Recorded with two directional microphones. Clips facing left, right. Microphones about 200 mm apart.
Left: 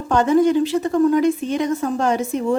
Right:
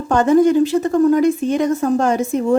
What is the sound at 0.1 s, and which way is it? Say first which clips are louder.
A woman's voice: right 3 dB; 45° right (ahead or behind).